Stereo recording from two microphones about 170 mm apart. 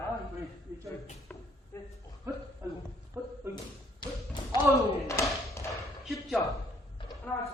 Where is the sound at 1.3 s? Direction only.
10° left (ahead or behind).